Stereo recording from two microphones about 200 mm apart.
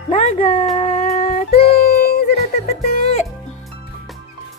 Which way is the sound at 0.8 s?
30° left (ahead or behind).